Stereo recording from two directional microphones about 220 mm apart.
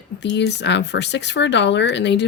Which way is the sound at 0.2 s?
50° left (ahead or behind).